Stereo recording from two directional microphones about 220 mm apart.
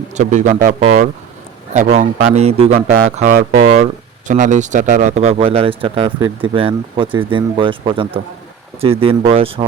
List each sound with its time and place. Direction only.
0.1 s speech: 35° right (ahead or behind)